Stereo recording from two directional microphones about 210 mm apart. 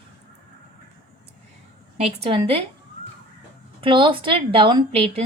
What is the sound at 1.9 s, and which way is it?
Speech, 30° right (ahead or behind).